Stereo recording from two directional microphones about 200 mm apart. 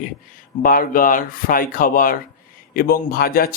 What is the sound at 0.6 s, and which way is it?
Speech, 45° left (ahead or behind).